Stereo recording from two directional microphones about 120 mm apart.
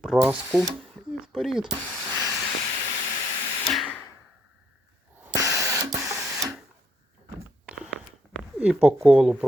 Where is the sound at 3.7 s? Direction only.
Centre (ahead or behind).